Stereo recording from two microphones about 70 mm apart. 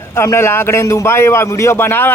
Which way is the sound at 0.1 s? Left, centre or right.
Left.